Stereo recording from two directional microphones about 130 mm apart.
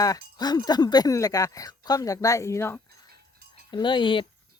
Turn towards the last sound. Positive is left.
turn(degrees=40)  # may be behind; listen again after turning